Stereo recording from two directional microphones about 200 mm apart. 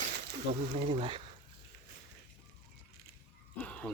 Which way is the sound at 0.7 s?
35° right (ahead or behind).